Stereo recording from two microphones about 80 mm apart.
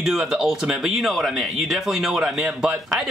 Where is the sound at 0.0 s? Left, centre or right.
Centre.